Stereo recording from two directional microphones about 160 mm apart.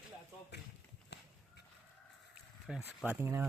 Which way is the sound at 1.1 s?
90° left.